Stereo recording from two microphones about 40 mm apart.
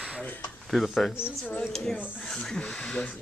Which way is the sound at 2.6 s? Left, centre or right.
Left.